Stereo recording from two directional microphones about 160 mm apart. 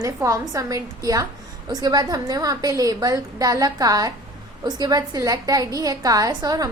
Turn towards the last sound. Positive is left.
turn(degrees=-25)  # may be behind; listen again after turning